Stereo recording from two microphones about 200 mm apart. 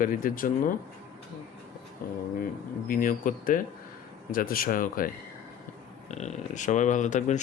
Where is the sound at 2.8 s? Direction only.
45° left (ahead or behind).